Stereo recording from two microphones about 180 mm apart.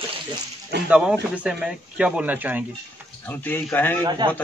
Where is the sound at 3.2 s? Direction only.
10° left (ahead or behind).